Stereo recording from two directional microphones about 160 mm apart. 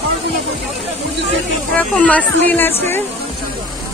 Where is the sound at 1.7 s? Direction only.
10° left (ahead or behind).